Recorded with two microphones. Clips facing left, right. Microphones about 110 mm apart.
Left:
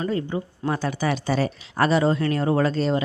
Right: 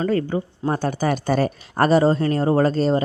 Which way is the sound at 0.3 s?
35° right (ahead or behind).